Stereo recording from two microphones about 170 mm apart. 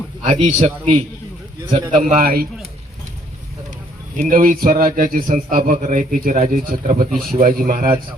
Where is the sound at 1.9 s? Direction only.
50° right (ahead or behind).